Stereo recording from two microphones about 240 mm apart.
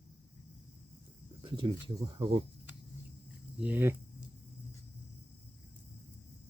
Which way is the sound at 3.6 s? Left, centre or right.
Centre.